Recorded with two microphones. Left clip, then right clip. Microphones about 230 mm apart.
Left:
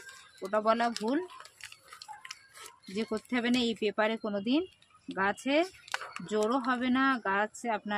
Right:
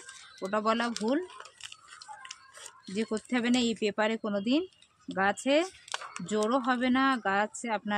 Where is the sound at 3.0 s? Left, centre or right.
Right.